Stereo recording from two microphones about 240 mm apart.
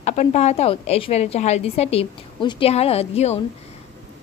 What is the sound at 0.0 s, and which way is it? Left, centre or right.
A woman's voice, left.